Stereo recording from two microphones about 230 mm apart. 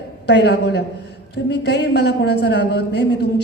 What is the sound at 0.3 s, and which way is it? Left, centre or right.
A woman's voice, left.